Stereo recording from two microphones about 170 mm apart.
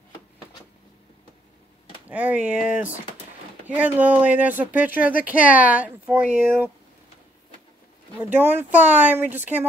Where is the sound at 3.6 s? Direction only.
10° right (ahead or behind).